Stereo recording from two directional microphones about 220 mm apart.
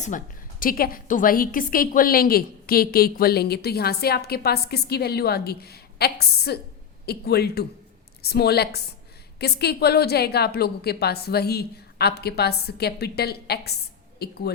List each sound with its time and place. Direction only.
0.6 s a woman's voice: 40° left (ahead or behind)